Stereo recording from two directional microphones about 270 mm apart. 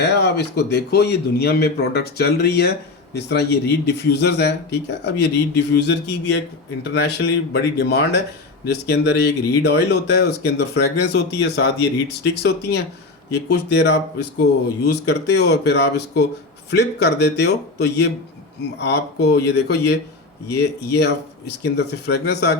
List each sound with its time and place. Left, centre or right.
0.0 s speech: left